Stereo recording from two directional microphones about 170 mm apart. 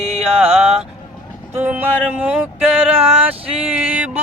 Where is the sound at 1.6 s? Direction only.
10° right (ahead or behind).